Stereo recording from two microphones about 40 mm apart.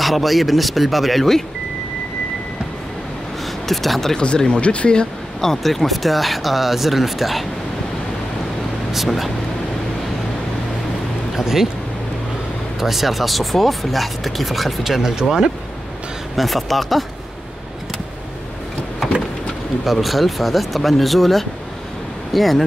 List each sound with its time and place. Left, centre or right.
0.0 s speech: centre
3.6 s speech: centre
4.6 s speech: left
5.4 s speech: centre
8.9 s speech: centre
11.3 s speech: centre
12.8 s speech: centre
19.8 s speech: centre